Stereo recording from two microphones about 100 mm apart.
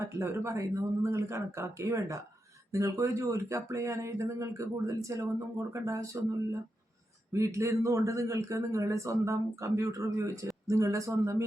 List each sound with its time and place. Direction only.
0.0 s a man's voice: 25° right (ahead or behind)